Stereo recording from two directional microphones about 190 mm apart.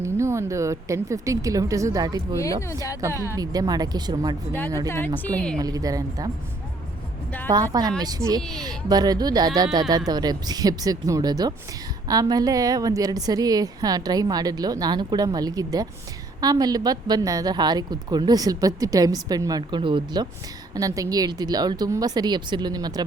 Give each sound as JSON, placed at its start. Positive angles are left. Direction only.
{"t": 0.0, "sound": "a woman's voice", "side_deg": -15}
{"t": 2.4, "sound": "speech", "side_deg": 15}
{"t": 3.0, "sound": "a woman's voice", "side_deg": -15}
{"t": 4.9, "sound": "speech", "side_deg": 10}
{"t": 5.5, "sound": "a woman's voice", "side_deg": -20}
{"t": 7.5, "sound": "a woman's voice", "side_deg": -20}